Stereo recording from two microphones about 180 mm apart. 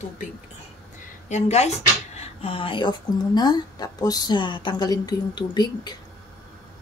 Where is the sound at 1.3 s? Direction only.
40° left (ahead or behind).